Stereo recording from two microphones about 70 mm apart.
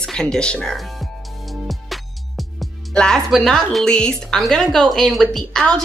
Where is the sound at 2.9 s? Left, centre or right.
Centre.